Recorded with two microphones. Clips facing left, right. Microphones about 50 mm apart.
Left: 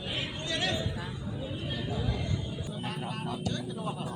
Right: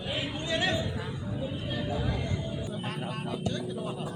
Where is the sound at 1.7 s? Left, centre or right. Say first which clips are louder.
Right 2 dB; centre.